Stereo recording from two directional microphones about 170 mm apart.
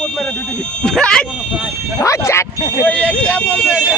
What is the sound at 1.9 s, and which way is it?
Speech, 15° left (ahead or behind).